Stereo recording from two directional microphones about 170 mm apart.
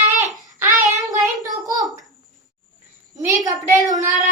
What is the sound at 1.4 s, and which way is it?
Speech, 20° right (ahead or behind).